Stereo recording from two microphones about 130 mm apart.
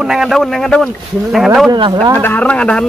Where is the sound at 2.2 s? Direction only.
15° left (ahead or behind).